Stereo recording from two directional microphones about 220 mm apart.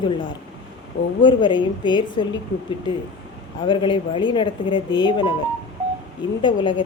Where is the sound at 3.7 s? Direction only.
20° left (ahead or behind).